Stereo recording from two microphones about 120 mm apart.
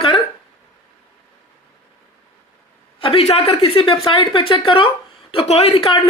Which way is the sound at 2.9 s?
50° left (ahead or behind).